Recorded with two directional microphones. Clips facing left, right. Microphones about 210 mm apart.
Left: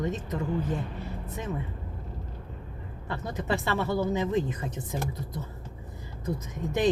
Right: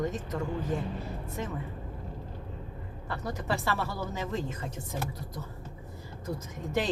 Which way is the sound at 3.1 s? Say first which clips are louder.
Left 3 dB; 20° left (ahead or behind).